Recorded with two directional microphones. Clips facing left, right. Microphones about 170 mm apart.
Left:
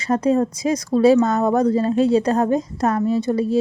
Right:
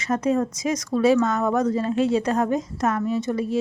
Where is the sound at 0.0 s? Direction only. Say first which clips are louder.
Left 4 dB; 30° left (ahead or behind).